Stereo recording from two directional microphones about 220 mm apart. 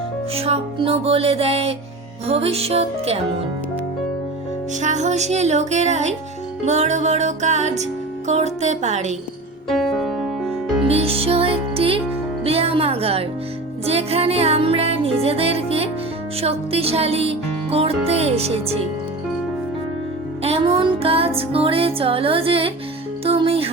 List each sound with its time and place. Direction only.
0.3 s music: 25° right (ahead or behind)
4.8 s music: 35° right (ahead or behind)
9.6 s music: centre (ahead or behind)
10.8 s music: 25° right (ahead or behind)
20.4 s music: 25° right (ahead or behind)